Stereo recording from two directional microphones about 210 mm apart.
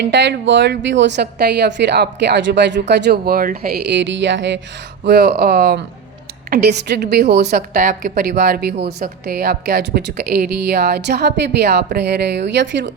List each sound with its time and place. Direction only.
0.0 s a woman's voice: 55° right (ahead or behind)